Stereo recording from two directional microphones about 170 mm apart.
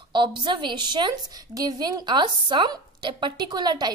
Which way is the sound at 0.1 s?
25° right (ahead or behind).